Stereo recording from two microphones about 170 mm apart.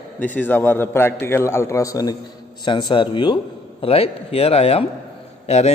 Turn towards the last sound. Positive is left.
turn(degrees=40)  # may be behind; listen again after turning